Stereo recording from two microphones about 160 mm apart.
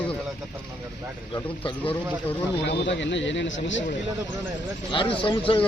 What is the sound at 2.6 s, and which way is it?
Speech, 90° left.